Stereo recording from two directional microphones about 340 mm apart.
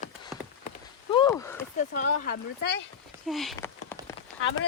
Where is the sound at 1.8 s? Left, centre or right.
Left.